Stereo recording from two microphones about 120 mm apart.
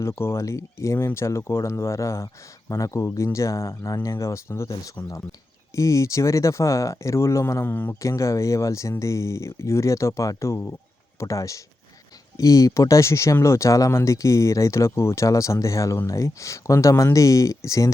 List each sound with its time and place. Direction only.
0.0 s speech: 20° left (ahead or behind)